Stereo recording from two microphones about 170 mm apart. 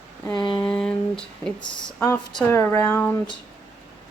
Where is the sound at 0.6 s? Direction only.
5° left (ahead or behind).